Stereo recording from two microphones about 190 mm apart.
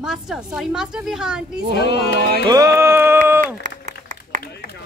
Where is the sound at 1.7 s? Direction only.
60° left (ahead or behind).